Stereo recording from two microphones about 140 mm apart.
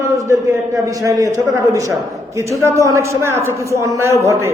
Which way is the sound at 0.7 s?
25° right (ahead or behind).